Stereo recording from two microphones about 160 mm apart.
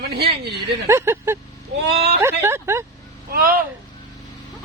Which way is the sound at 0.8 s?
15° right (ahead or behind).